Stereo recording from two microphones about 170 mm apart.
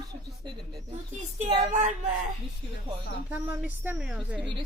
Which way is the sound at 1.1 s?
40° right (ahead or behind).